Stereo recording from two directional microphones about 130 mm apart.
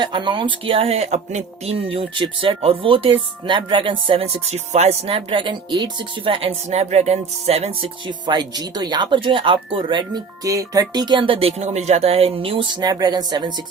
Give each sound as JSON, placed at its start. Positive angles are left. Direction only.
{"t": 0.0, "sound": "speech", "side_deg": -35}
{"t": 6.7, "sound": "speech", "side_deg": -60}
{"t": 12.8, "sound": "speech", "side_deg": -30}